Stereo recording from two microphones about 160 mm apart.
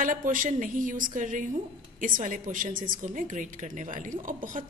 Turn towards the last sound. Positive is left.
turn(degrees=-55)  # may be behind; listen again after turning